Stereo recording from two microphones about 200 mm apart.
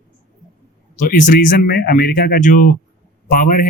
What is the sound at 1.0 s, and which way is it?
Speech, 45° left (ahead or behind).